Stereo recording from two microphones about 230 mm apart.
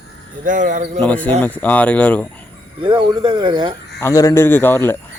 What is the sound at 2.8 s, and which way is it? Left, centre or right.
Speech, right.